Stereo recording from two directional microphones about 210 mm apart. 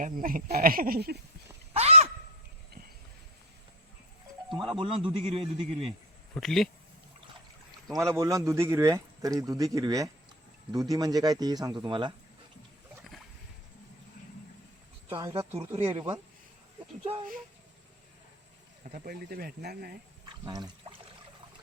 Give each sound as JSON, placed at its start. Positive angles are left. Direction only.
{"t": 0.0, "sound": "speech", "side_deg": -40}
{"t": 1.7, "sound": "a sound", "side_deg": -30}
{"t": 4.8, "sound": "a man's voice", "side_deg": -25}
{"t": 6.3, "sound": "speech", "side_deg": 0}
{"t": 7.9, "sound": "speech", "side_deg": -15}
{"t": 15.1, "sound": "a man's voice", "side_deg": -20}
{"t": 18.9, "sound": "speech", "side_deg": -45}
{"t": 20.4, "sound": "speech", "side_deg": -20}